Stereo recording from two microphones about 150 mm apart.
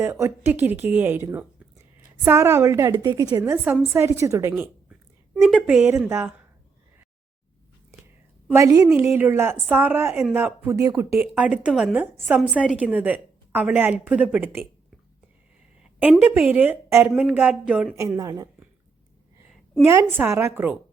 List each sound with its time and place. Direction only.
0.0 s a woman's voice: 15° right (ahead or behind)
8.4 s a woman's voice: 20° right (ahead or behind)
16.2 s a woman's voice: 10° right (ahead or behind)
17.9 s a woman's voice: 20° right (ahead or behind)
19.8 s a woman's voice: 15° right (ahead or behind)